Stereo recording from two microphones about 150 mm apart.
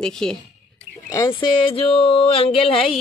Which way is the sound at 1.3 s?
35° left (ahead or behind).